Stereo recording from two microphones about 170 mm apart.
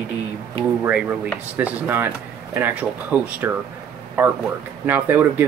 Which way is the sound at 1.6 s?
10° right (ahead or behind).